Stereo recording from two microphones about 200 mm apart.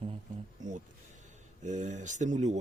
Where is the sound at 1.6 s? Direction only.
35° right (ahead or behind).